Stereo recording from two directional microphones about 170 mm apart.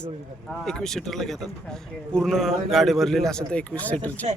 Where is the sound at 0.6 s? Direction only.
5° left (ahead or behind).